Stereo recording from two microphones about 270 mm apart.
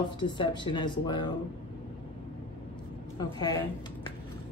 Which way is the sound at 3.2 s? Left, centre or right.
Centre.